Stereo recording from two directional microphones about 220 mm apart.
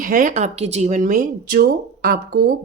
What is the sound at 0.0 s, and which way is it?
A woman's voice, 40° right (ahead or behind).